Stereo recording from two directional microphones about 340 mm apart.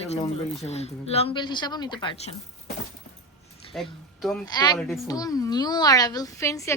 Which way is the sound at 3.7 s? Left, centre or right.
Centre.